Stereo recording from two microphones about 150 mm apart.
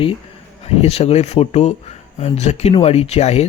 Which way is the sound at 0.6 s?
45° left (ahead or behind).